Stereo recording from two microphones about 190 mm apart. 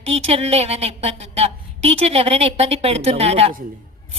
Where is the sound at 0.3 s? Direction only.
30° right (ahead or behind).